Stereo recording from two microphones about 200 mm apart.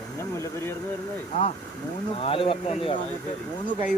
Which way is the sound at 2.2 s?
30° left (ahead or behind).